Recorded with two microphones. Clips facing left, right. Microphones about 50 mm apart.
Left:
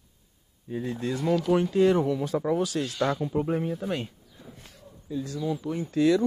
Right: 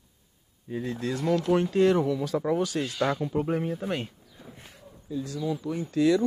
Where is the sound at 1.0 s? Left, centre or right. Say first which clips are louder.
Even; left.